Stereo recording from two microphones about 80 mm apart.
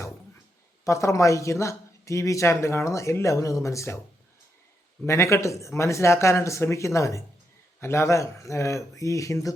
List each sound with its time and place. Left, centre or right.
0.9 s a man's voice: left
5.0 s a man's voice: left